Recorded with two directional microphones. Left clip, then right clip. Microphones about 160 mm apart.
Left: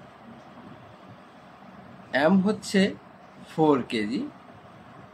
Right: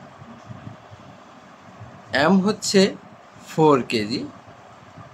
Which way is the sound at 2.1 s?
30° right (ahead or behind).